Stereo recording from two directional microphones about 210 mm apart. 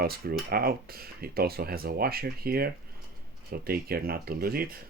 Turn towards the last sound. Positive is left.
turn(degrees=-45)  # may be behind; listen again after turning